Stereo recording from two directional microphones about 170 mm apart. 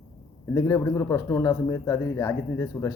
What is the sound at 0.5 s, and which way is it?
Speech, 20° left (ahead or behind).